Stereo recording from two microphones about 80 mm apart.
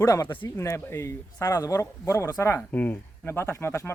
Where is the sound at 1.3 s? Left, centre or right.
Left.